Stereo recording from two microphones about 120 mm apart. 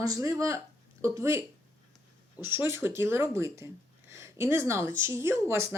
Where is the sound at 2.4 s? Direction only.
20° right (ahead or behind).